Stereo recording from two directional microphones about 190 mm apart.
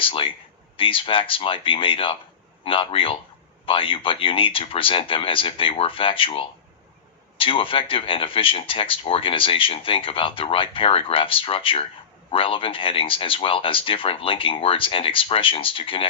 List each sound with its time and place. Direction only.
0.0 s speech: 25° left (ahead or behind)